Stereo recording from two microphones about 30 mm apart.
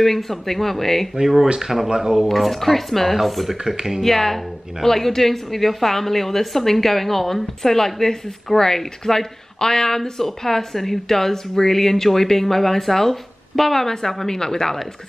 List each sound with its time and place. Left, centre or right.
0.0 s a woman's voice: centre
1.2 s speech: centre
1.9 s speech: right
2.2 s a woman's voice: centre
4.0 s a woman's voice: centre
13.8 s a woman's voice: centre